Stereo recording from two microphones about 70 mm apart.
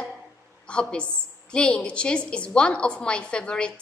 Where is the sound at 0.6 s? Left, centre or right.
Centre.